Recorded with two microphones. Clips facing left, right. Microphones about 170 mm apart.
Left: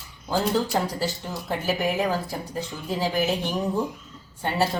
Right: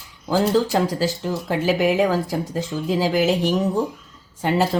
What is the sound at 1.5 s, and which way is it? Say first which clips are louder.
Speech: right 6 dB; 90° right.